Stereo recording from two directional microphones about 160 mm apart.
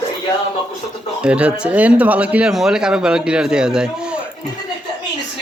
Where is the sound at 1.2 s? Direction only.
5° right (ahead or behind).